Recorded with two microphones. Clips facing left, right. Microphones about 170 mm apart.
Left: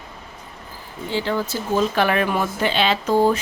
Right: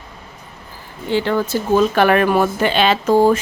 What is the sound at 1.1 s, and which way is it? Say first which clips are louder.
Speech: right 6 dB; 60° right (ahead or behind).